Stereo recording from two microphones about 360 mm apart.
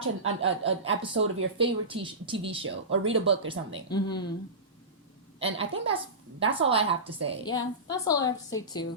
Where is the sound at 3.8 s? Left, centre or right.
Centre.